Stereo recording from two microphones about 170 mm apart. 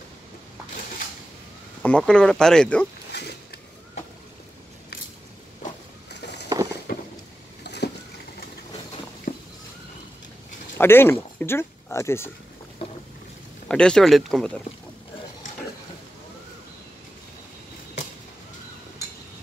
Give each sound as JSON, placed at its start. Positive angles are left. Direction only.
{"t": 1.8, "sound": "speech", "side_deg": 5}
{"t": 3.1, "sound": "a sound", "side_deg": 75}
{"t": 7.6, "sound": "boat", "side_deg": 75}
{"t": 9.3, "sound": "a sound", "side_deg": 55}
{"t": 10.8, "sound": "speech", "side_deg": 15}
{"t": 13.7, "sound": "speech", "side_deg": 5}